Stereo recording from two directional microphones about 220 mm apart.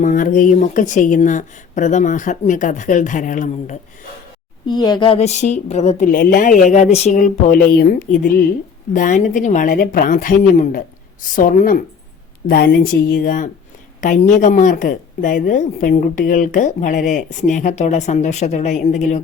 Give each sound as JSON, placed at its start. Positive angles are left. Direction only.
{"t": 0.0, "sound": "speech", "side_deg": 35}
{"t": 4.7, "sound": "speech", "side_deg": 20}
{"t": 12.5, "sound": "speech", "side_deg": 50}